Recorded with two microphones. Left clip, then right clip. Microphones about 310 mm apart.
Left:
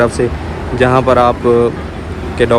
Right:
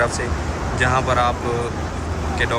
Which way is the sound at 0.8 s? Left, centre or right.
Centre.